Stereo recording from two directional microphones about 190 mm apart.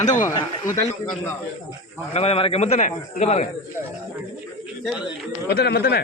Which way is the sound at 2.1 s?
35° left (ahead or behind).